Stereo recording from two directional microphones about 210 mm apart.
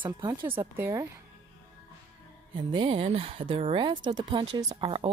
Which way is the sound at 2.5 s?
25° right (ahead or behind).